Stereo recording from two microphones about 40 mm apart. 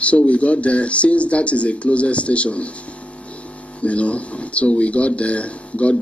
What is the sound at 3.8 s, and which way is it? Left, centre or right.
Speech, left.